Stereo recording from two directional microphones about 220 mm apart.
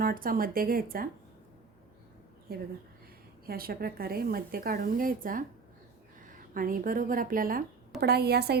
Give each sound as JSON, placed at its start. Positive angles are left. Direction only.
{"t": 0.0, "sound": "speech", "side_deg": -40}
{"t": 2.5, "sound": "a woman's voice", "side_deg": -45}